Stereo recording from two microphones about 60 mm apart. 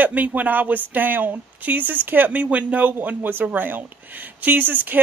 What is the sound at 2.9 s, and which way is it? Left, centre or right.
Speech, right.